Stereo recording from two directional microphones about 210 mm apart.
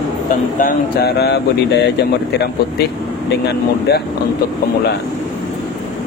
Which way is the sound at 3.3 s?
50° left (ahead or behind).